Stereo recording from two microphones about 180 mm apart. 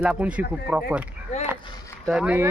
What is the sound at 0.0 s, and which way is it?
Speech, 10° right (ahead or behind).